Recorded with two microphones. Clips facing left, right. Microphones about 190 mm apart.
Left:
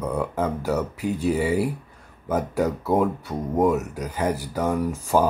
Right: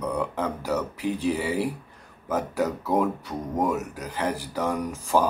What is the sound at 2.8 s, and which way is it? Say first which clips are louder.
Speech: left 2 dB; 5° left (ahead or behind).